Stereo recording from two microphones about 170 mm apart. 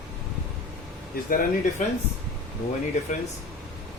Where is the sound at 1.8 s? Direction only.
50° left (ahead or behind).